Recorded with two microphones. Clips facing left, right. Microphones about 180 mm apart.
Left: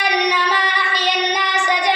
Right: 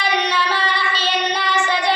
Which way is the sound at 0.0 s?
15° left (ahead or behind).